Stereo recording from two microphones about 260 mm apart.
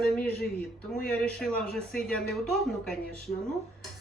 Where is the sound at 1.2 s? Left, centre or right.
Centre.